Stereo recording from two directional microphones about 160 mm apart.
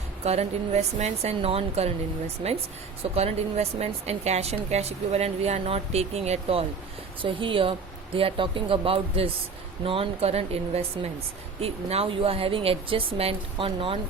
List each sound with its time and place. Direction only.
0.3 s a woman's voice: 45° right (ahead or behind)